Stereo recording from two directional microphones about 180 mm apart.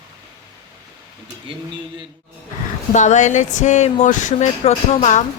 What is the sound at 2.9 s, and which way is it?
Speech, 40° left (ahead or behind).